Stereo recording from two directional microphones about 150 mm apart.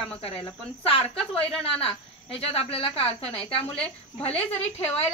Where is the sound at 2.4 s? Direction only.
40° left (ahead or behind).